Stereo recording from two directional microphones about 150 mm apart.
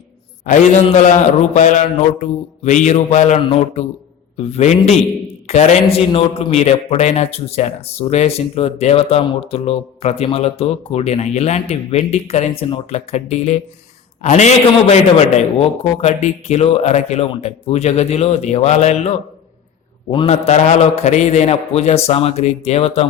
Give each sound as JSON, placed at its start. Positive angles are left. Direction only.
{"t": 0.5, "sound": "a man's voice", "side_deg": 60}